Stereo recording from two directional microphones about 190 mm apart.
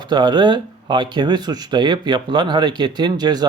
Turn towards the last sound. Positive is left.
turn(degrees=-20)  # may be behind; listen again after turning